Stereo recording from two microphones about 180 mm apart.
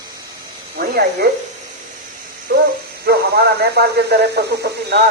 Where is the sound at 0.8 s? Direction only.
60° right (ahead or behind).